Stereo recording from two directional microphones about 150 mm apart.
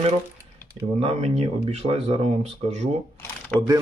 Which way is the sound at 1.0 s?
45° right (ahead or behind).